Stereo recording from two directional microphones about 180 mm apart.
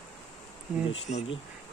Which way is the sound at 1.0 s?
35° left (ahead or behind).